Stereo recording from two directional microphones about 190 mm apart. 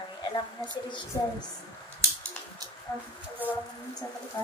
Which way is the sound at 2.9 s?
15° left (ahead or behind).